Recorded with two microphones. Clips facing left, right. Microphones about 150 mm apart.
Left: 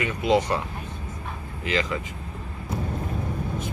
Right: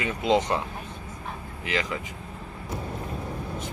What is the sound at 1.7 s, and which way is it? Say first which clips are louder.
Speech: left 3 dB; 15° right (ahead or behind).